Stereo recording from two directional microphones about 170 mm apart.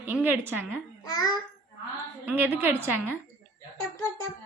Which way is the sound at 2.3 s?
10° right (ahead or behind).